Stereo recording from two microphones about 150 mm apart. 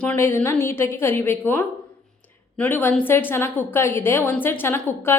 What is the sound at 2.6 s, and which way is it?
A woman's voice, 15° left (ahead or behind).